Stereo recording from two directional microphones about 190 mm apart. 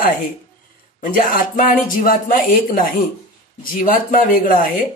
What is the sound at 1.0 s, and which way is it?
Speech, 45° left (ahead or behind).